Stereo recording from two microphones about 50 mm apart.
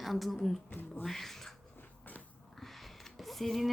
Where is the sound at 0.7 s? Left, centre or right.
Left.